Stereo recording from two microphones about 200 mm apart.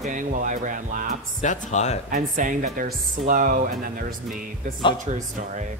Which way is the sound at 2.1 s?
45° right (ahead or behind).